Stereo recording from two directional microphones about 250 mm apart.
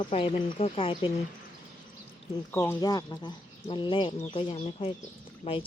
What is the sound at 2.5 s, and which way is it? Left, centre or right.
Speech, centre.